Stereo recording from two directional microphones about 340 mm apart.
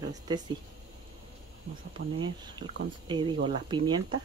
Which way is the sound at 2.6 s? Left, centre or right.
Right.